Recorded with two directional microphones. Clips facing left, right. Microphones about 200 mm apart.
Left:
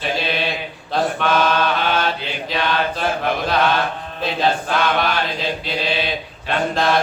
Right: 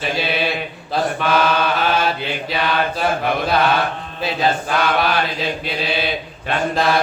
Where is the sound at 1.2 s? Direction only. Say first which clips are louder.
Right 1 dB; 5° right (ahead or behind).